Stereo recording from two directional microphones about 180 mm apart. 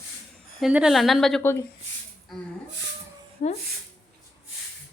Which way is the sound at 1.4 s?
15° left (ahead or behind).